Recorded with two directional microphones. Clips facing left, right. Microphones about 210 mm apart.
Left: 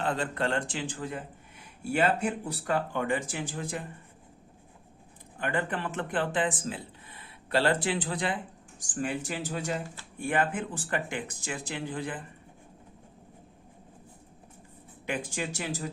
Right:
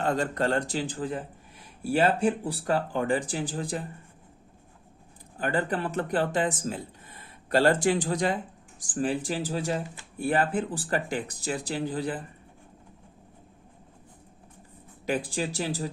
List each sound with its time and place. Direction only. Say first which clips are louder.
0.0 s speech: right 3 dB; 45° right (ahead or behind)
5.4 s speech: right 3 dB; 35° right (ahead or behind)
15.0 s speech: right 4 dB; 35° right (ahead or behind)